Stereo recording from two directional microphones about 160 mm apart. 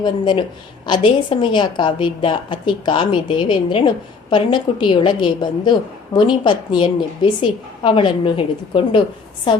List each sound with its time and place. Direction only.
0.0 s a woman's voice: 30° left (ahead or behind)